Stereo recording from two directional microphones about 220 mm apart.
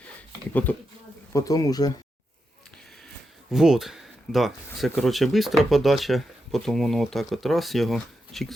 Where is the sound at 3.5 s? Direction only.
Centre (ahead or behind).